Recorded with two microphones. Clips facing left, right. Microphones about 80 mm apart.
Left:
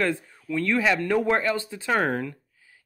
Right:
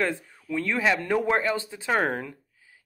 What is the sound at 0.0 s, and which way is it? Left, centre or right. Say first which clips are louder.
Speech: left 2 dB; right.